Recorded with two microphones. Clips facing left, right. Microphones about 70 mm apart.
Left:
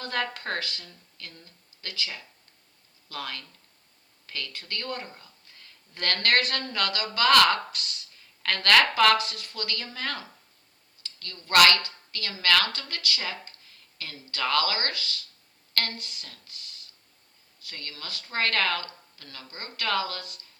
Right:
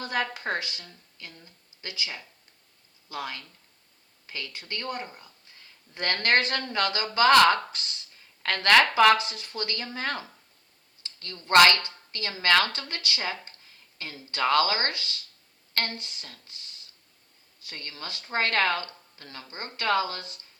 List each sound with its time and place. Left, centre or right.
0.0 s a woman's voice: centre